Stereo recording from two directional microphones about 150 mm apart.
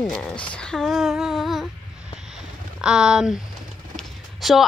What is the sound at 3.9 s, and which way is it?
Clip-clop, centre (ahead or behind).